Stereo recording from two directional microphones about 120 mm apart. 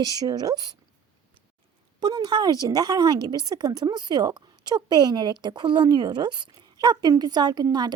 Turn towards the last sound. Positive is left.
turn(degrees=-35)  # may be behind; listen again after turning